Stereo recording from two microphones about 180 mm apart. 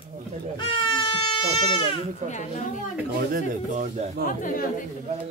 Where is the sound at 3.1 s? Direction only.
50° right (ahead or behind).